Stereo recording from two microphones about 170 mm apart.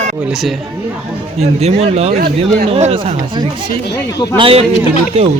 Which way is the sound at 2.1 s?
60° right (ahead or behind).